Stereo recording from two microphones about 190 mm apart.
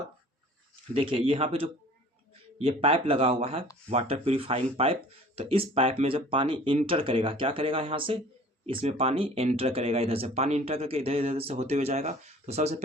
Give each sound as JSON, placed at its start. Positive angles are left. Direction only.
{"t": 0.9, "sound": "speech", "side_deg": -30}